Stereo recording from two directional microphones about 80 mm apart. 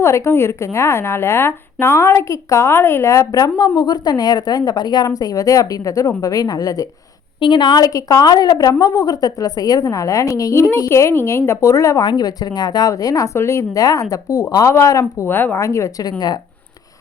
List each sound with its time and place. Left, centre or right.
0.0 s speech: left
7.3 s speech: left
11.9 s speech: left
13.3 s speech: left
15.3 s speech: left
15.6 s speech: left
16.0 s speech: left